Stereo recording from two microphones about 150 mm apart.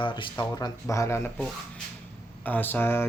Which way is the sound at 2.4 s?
15° left (ahead or behind).